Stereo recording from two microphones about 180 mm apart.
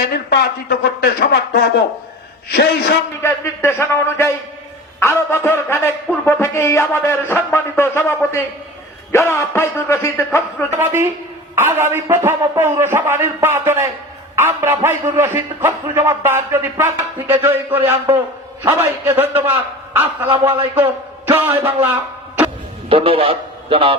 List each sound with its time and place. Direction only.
0.0 s speech: 65° left (ahead or behind)
3.2 s music: 15° left (ahead or behind)
10.7 s a man's voice: 15° right (ahead or behind)
18.6 s a man's voice: 15° right (ahead or behind)
21.2 s a man's voice: 15° right (ahead or behind)
22.9 s a man's voice: 30° right (ahead or behind)